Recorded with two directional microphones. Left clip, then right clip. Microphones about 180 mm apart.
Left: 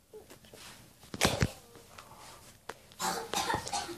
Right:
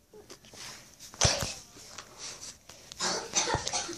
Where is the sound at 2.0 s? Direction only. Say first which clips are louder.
Right 4 dB; 35° right (ahead or behind).